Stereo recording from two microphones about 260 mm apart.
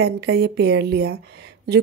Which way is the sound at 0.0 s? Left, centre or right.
Right.